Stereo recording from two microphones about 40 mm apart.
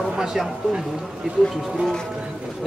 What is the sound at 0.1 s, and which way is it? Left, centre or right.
Speech, centre.